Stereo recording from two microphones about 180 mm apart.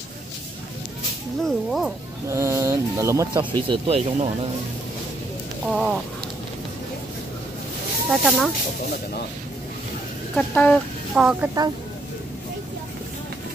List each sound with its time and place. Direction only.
1.4 s speech: centre (ahead or behind)
2.2 s speech: 15° right (ahead or behind)
3.6 s speech: 30° right (ahead or behind)
5.7 s speech: centre (ahead or behind)
8.1 s speech: centre (ahead or behind)
10.3 s speech: 5° left (ahead or behind)
11.1 s speech: 5° right (ahead or behind)